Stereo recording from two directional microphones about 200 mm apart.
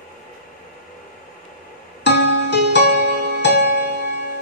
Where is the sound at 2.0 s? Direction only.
60° left (ahead or behind).